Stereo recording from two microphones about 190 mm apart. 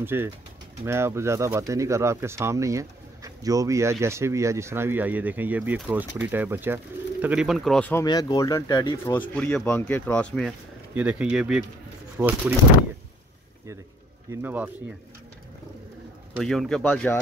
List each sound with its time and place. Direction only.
0.0 s speech: 10° right (ahead or behind); by 8.0 s 5° left (ahead or behind)
8.0 s speech: 20° left (ahead or behind); by 10.5 s 5° left (ahead or behind)
11.0 s speech: 10° right (ahead or behind)
14.3 s speech: 10° right (ahead or behind)
16.3 s speech: centre (ahead or behind)